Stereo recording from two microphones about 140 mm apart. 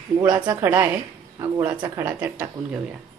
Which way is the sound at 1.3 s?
30° right (ahead or behind).